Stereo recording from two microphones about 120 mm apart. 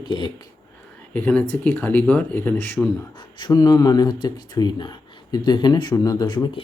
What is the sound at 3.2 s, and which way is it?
Speech, 40° left (ahead or behind).